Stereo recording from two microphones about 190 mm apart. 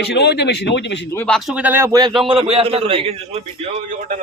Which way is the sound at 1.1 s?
5° left (ahead or behind).